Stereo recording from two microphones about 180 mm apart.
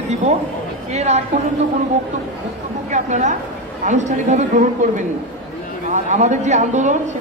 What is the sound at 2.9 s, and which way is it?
A man's voice, 40° right (ahead or behind).